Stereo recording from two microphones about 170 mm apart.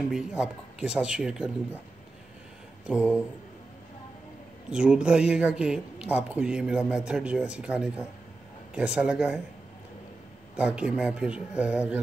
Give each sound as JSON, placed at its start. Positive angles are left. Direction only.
{"t": 0.1, "sound": "speech", "side_deg": -5}
{"t": 2.9, "sound": "speech", "side_deg": -5}
{"t": 4.6, "sound": "speech", "side_deg": -5}
{"t": 10.5, "sound": "speech", "side_deg": -5}